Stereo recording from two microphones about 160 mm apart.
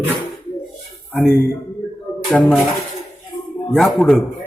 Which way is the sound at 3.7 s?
5° left (ahead or behind).